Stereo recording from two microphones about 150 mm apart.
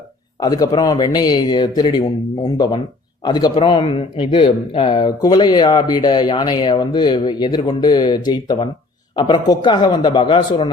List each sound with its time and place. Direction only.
0.3 s speech: 25° left (ahead or behind)